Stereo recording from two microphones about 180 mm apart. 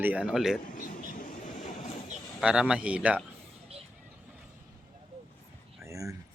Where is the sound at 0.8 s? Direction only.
50° left (ahead or behind).